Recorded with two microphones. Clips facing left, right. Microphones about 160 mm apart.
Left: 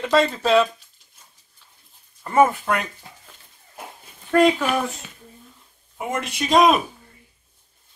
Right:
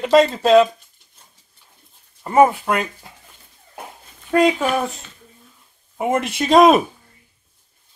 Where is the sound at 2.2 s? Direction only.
20° right (ahead or behind).